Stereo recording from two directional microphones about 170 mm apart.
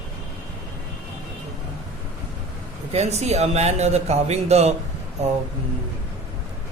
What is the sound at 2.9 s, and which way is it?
A man's voice, 40° right (ahead or behind).